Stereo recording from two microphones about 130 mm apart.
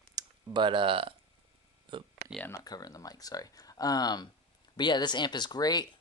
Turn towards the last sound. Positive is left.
turn(degrees=30)  # may be behind; listen again after turning